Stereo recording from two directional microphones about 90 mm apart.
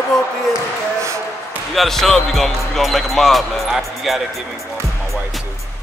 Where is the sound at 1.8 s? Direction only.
5° left (ahead or behind).